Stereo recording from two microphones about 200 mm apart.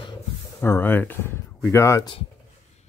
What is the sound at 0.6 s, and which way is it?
Speech, 10° left (ahead or behind).